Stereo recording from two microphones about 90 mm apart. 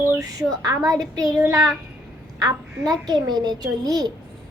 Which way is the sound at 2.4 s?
45° right (ahead or behind).